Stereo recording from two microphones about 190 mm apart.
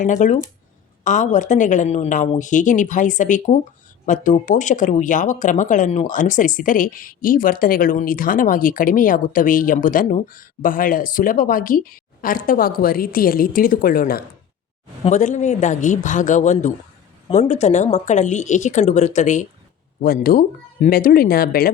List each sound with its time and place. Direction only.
0.0 s a woman's voice: 40° left (ahead or behind)
20.0 s speech: 50° left (ahead or behind)